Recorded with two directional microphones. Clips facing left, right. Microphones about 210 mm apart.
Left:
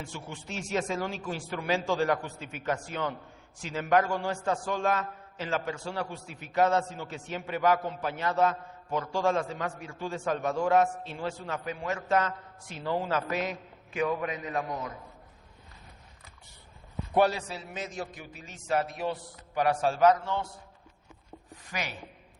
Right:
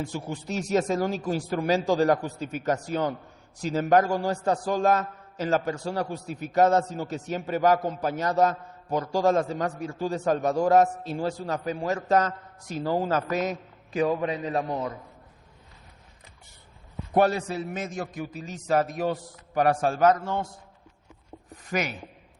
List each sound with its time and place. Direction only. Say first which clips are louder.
0.0 s a man's voice: right 8 dB; 40° right (ahead or behind)
17.2 s a man's voice: right 3 dB; 50° right (ahead or behind)
21.7 s a man's voice: right 8 dB; 45° right (ahead or behind)